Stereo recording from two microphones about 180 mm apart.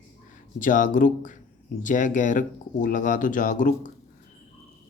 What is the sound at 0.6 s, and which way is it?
Speech, 45° left (ahead or behind).